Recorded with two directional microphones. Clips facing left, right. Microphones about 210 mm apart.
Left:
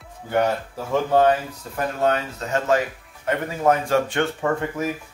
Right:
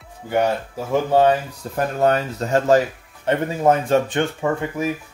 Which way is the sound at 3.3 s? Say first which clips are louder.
Right 3 dB; 25° right (ahead or behind).